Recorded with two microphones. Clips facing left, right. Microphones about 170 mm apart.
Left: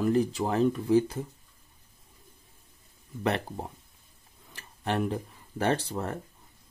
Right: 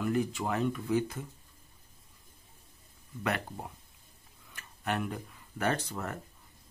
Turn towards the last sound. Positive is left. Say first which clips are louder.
# left 4 dB
turn(degrees=30)  # may be behind; listen again after turning